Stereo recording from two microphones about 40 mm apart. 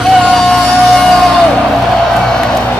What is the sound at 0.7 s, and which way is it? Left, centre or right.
Music, centre.